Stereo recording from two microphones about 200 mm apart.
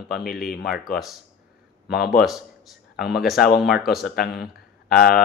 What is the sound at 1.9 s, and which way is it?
Speech, 50° left (ahead or behind).